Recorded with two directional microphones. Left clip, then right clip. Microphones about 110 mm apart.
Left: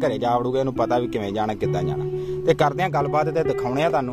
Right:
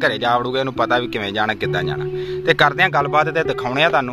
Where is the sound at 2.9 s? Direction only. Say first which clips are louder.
Right 4 dB; centre (ahead or behind).